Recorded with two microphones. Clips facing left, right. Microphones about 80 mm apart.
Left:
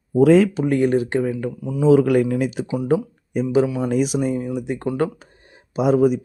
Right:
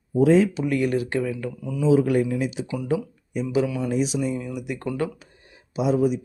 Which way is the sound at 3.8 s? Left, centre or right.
Left.